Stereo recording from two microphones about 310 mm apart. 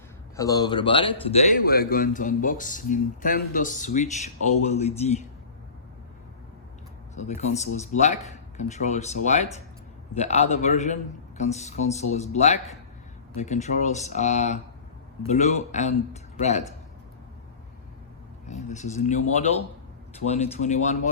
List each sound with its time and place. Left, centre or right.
0.3 s a man's voice: centre
7.2 s a man's voice: left
18.4 s a man's voice: left
20.2 s a man's voice: left